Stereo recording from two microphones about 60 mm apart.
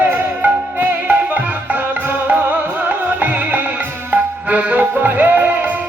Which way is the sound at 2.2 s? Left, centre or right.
Right.